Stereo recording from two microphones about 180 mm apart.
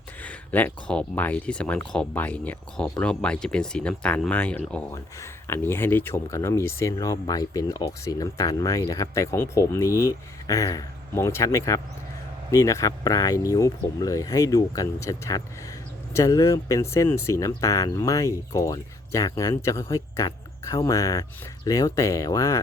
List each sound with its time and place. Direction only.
0.2 s speech: 10° left (ahead or behind)